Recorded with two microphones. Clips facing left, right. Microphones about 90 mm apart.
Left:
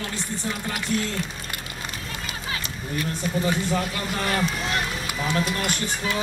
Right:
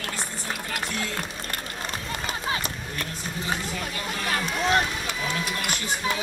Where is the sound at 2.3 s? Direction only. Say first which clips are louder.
Right 4 dB; 45° right (ahead or behind).